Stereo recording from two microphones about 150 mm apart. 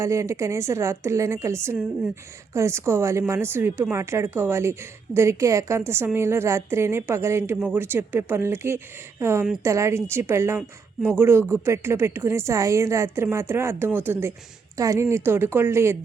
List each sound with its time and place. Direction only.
0.0 s a woman's voice: 20° right (ahead or behind)